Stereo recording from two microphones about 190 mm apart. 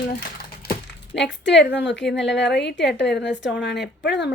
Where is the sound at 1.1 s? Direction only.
65° left (ahead or behind).